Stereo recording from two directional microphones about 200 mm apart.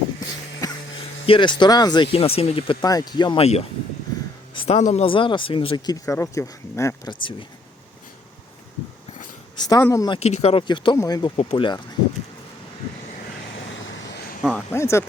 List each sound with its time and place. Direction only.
0.6 s music: 20° left (ahead or behind)
1.3 s speech: 25° left (ahead or behind)
9.6 s speech: 20° left (ahead or behind)
10.2 s speech: 30° left (ahead or behind)
14.0 s a sound: 55° left (ahead or behind)
14.4 s speech: 10° left (ahead or behind)